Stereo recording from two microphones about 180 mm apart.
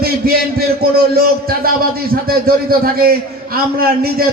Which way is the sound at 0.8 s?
60° right (ahead or behind).